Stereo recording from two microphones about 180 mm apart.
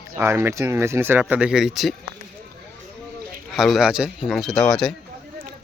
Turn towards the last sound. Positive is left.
turn(degrees=5)  # may be behind; listen again after turning